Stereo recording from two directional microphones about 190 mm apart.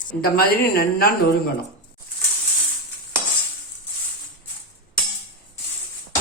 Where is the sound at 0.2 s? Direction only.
50° left (ahead or behind).